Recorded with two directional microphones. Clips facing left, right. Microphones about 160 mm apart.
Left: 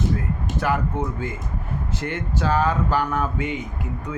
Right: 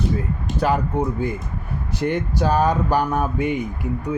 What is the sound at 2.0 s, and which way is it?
Speech, 15° right (ahead or behind).